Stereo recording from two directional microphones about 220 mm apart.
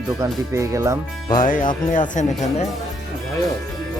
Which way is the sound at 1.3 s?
35° left (ahead or behind).